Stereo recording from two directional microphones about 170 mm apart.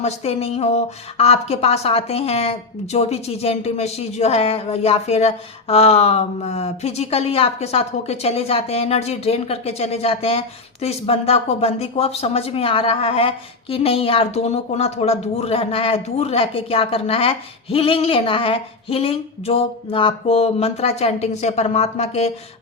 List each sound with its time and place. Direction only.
0.0 s a woman's voice: 35° left (ahead or behind)